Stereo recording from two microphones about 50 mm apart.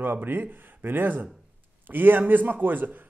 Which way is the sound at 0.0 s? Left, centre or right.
Right.